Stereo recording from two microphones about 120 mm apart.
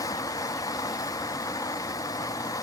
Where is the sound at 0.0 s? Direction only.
30° left (ahead or behind).